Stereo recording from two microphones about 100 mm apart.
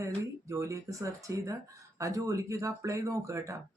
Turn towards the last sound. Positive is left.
turn(degrees=-30)  # may be behind; listen again after turning